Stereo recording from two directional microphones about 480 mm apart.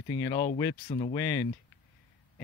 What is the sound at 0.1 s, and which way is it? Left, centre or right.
Speech, centre.